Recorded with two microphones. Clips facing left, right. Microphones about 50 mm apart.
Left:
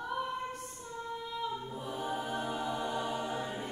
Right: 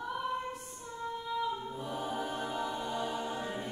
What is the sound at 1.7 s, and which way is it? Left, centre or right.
Choir, centre.